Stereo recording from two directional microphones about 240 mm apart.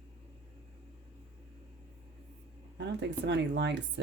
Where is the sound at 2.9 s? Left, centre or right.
Right.